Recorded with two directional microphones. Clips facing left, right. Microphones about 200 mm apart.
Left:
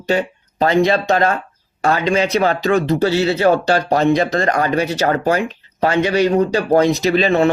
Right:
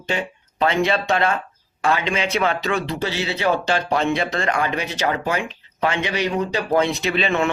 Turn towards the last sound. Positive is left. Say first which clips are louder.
# left 7 dB
turn(degrees=35)  # may be behind; listen again after turning